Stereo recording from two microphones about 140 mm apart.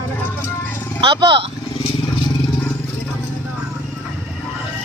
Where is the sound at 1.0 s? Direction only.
35° right (ahead or behind).